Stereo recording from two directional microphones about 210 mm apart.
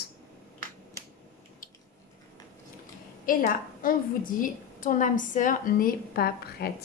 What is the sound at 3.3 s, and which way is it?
A woman's voice, 40° left (ahead or behind).